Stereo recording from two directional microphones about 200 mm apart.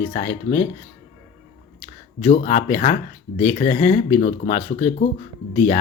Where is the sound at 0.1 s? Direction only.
35° left (ahead or behind).